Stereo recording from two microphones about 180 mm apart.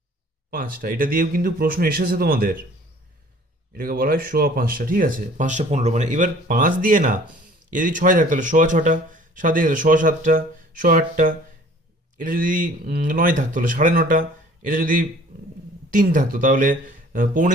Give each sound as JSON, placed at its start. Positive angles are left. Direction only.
{"t": 0.5, "sound": "speech", "side_deg": -50}
{"t": 3.8, "sound": "speech", "side_deg": -55}